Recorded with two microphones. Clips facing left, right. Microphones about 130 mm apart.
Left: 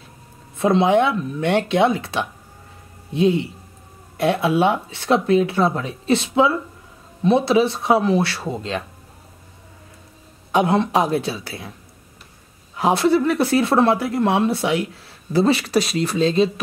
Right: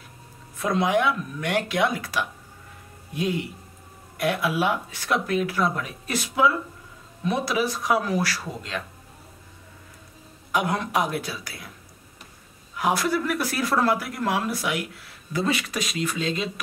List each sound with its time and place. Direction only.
0.6 s speech: 25° left (ahead or behind)
10.5 s speech: 25° left (ahead or behind)
12.7 s speech: 25° left (ahead or behind)